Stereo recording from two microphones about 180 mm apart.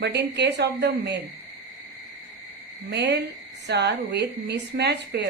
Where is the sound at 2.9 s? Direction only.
70° right (ahead or behind).